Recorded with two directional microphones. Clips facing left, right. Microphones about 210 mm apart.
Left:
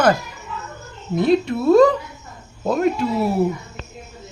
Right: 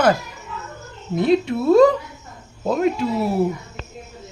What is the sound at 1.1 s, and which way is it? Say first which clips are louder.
A man's voice: even; centre (ahead or behind).